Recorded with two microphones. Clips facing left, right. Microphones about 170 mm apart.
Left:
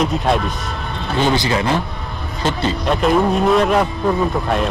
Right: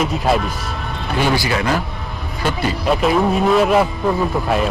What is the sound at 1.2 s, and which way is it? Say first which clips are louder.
Speech: left 1 dB; 20° left (ahead or behind).